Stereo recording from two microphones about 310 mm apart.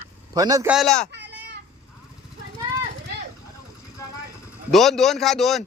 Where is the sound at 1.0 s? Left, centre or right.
Right.